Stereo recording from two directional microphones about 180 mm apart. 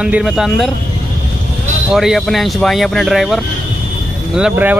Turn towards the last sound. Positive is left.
turn(degrees=-10)  # may be behind; listen again after turning